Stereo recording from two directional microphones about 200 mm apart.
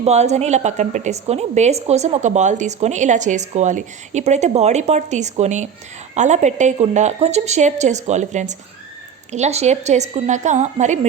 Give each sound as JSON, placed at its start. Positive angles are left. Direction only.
{"t": 0.0, "sound": "a woman's voice", "side_deg": -35}